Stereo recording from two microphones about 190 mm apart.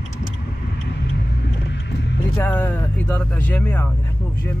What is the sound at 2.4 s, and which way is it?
Speech, 10° left (ahead or behind).